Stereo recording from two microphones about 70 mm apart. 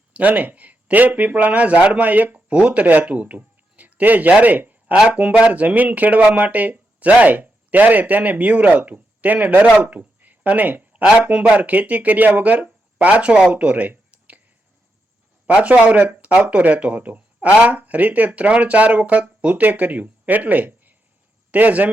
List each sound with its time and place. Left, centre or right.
0.1 s speech: right
13.5 s a sound: centre
15.4 s speech: centre